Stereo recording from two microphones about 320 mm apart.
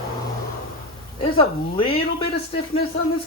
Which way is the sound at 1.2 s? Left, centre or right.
Centre.